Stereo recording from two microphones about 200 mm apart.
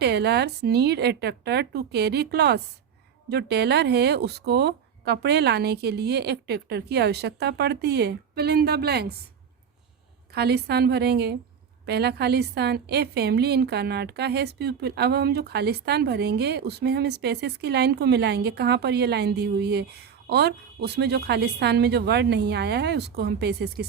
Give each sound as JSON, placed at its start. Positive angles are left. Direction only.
{"t": 0.0, "sound": "a woman's voice", "side_deg": -55}
{"t": 10.3, "sound": "a woman's voice", "side_deg": -55}